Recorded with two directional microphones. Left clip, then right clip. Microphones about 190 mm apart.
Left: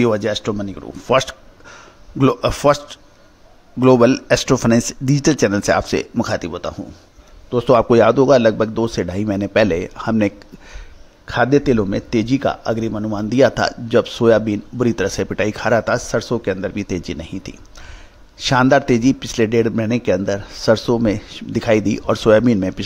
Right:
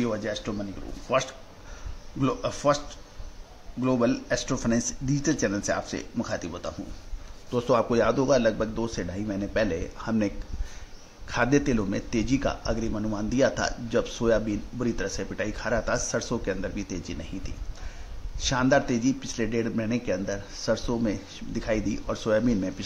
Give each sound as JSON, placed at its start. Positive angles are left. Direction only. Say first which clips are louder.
{"t": 0.0, "sound": "a man's voice", "louder": "left 12 dB", "side_deg": 50}